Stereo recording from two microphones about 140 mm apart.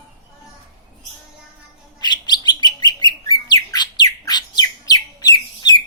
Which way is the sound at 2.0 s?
30° left (ahead or behind).